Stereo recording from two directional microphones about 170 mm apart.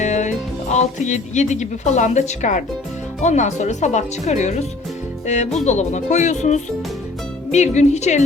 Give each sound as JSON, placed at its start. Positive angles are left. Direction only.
{"t": 0.0, "sound": "speech", "side_deg": 45}